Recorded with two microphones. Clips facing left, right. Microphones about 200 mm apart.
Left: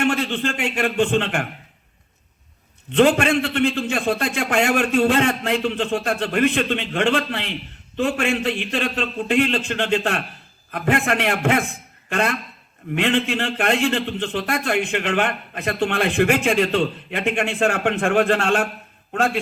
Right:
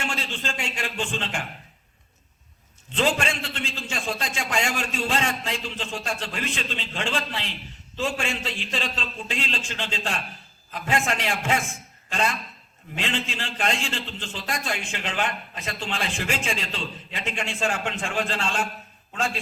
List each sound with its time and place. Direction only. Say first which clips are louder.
0.0 s a man's voice: left 10 dB; 60° left (ahead or behind)
2.9 s a man's voice: left 9 dB; 60° left (ahead or behind)